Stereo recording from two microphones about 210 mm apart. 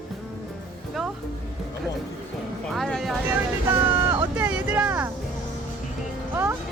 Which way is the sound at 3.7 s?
10° right (ahead or behind).